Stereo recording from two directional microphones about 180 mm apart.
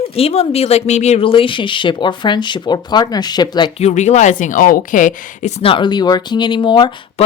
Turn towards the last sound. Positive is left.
turn(degrees=25)  # may be behind; listen again after turning